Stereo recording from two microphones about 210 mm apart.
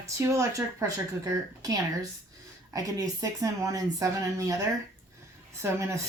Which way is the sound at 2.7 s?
15° right (ahead or behind).